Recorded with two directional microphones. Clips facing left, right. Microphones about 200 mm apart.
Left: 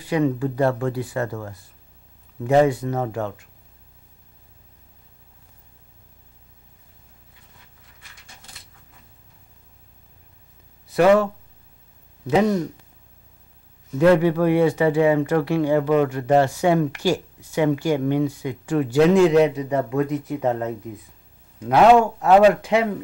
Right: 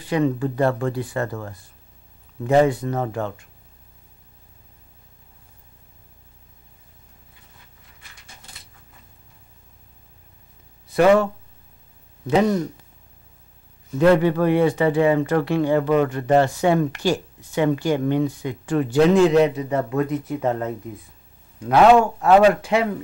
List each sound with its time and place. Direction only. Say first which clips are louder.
0.0 s speech: even; 10° left (ahead or behind)
10.9 s speech: even; 5° left (ahead or behind)
12.3 s speech: even; 5° left (ahead or behind)
13.9 s speech: even; 10° left (ahead or behind)